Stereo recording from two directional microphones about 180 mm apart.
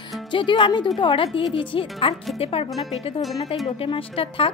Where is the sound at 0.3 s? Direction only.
25° left (ahead or behind).